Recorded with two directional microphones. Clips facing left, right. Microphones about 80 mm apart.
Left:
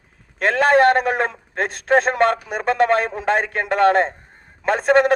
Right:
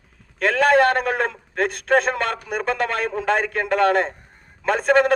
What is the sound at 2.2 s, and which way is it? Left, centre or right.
A man's voice, left.